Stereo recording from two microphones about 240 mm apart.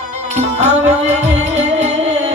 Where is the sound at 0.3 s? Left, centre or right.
Right.